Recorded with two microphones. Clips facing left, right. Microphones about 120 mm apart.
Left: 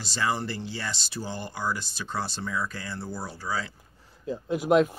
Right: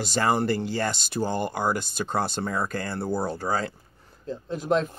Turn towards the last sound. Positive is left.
turn(degrees=10)  # may be behind; listen again after turning